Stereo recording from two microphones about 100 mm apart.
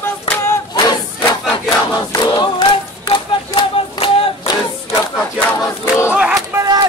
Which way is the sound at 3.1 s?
55° left (ahead or behind).